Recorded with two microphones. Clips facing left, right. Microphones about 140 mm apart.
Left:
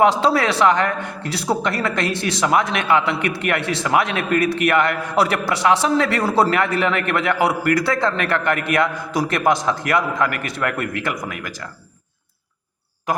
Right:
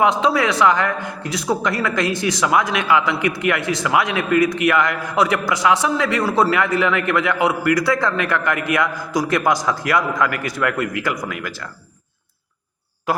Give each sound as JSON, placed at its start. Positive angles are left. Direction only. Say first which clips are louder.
{"t": 0.0, "sound": "a man's voice", "louder": "left 1 dB", "side_deg": 35}